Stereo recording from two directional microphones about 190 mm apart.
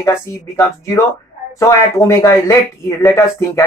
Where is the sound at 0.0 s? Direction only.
15° left (ahead or behind).